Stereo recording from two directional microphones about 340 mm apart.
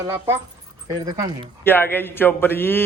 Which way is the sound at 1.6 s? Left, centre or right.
Centre.